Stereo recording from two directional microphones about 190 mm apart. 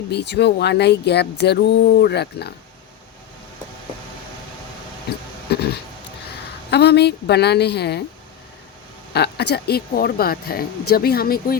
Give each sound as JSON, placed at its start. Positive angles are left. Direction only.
{"t": 0.1, "sound": "speech", "side_deg": 60}
{"t": 5.5, "sound": "speech", "side_deg": 60}
{"t": 6.7, "sound": "speech", "side_deg": 60}
{"t": 9.1, "sound": "speech", "side_deg": 60}